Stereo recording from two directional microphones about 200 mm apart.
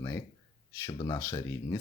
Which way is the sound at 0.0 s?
15° left (ahead or behind).